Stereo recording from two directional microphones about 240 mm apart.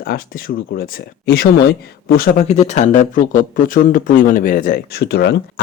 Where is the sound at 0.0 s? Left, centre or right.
Left.